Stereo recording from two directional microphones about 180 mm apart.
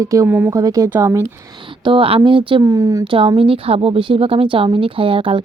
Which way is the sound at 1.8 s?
30° right (ahead or behind).